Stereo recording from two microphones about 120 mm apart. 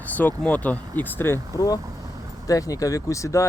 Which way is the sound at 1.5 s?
35° left (ahead or behind).